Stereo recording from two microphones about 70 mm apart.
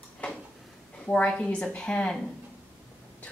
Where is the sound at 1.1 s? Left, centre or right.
Centre.